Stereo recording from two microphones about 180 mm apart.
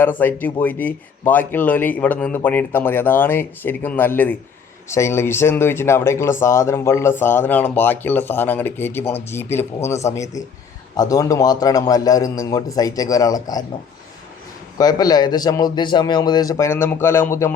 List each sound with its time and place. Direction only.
0.0 s a man's voice: 10° left (ahead or behind)
14.8 s a man's voice: 20° left (ahead or behind)